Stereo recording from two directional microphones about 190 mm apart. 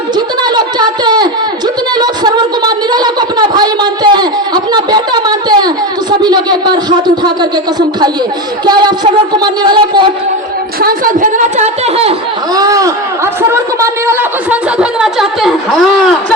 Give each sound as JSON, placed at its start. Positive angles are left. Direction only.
{"t": 0.4, "sound": "a sound", "side_deg": -20}
{"t": 8.6, "sound": "speech", "side_deg": -20}
{"t": 10.8, "sound": "speech", "side_deg": -50}
{"t": 12.5, "sound": "a woman's voice", "side_deg": -20}